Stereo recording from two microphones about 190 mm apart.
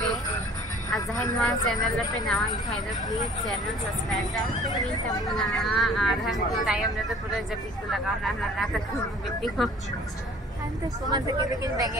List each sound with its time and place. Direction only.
0.8 s a man's voice: 20° left (ahead or behind)
1.4 s speech: centre (ahead or behind)
5.2 s speech: centre (ahead or behind)
11.1 s speech: 20° right (ahead or behind)